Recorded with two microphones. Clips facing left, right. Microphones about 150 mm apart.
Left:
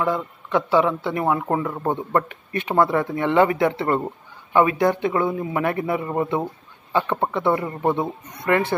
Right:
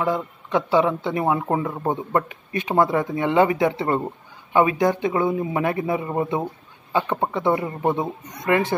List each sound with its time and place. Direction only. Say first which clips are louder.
0.0 s speech: even; 20° right (ahead or behind)